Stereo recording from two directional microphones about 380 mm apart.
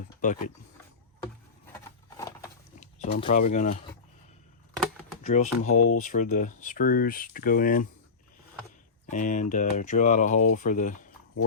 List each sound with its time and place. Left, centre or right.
0.2 s speech: centre
2.1 s a sound: centre
2.8 s speech: centre
5.2 s speech: centre
5.7 s speech: left
6.0 s speech: centre
9.0 s speech: centre